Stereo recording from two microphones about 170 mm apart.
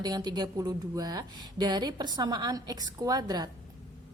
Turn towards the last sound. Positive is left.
turn(degrees=-25)  # may be behind; listen again after turning